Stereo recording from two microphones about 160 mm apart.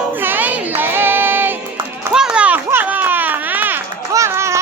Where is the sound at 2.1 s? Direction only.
5° right (ahead or behind).